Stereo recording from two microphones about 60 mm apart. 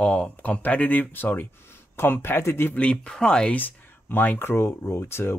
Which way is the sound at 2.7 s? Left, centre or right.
Centre.